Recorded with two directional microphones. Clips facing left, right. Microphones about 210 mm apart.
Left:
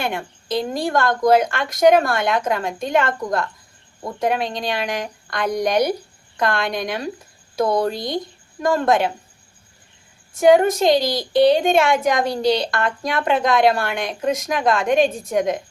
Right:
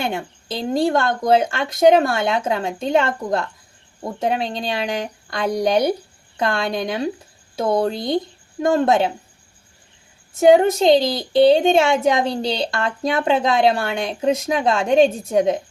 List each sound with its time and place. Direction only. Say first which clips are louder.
0.0 s a woman's voice: right 1 dB; 25° right (ahead or behind)
10.5 s a woman's voice: right 1 dB; 25° right (ahead or behind)